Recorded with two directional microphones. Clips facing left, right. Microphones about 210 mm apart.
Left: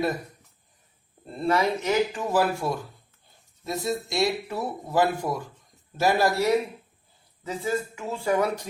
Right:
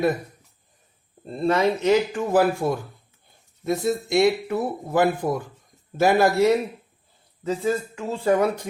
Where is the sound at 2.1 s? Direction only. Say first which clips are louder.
Right 4 dB; 55° right (ahead or behind).